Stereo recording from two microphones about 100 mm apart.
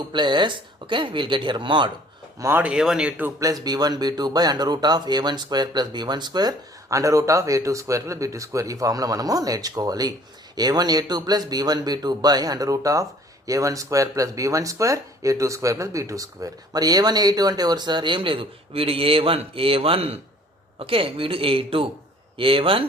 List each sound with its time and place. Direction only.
0.1 s speech: 50° right (ahead or behind)
2.4 s speech: 25° right (ahead or behind)
2.6 s speech: 5° right (ahead or behind)
3.4 s speech: 40° right (ahead or behind); by 22.9 s 65° right (ahead or behind)